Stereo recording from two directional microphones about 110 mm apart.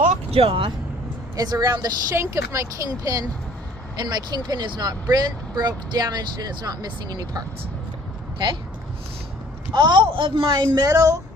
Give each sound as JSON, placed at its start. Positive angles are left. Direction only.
{"t": 0.1, "sound": "vehicle", "side_deg": -60}
{"t": 1.4, "sound": "speech", "side_deg": -35}
{"t": 9.7, "sound": "a woman's voice", "side_deg": -45}
{"t": 10.8, "sound": "speech", "side_deg": -30}